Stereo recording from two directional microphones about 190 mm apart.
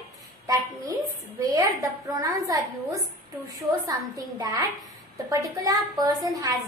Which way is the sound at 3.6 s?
20° right (ahead or behind).